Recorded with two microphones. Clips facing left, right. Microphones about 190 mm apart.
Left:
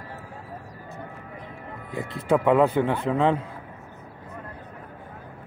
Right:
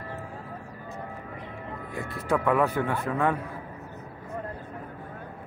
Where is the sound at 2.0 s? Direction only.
20° left (ahead or behind).